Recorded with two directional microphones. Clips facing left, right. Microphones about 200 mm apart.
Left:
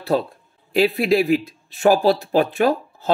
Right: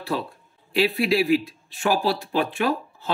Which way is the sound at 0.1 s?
40° left (ahead or behind).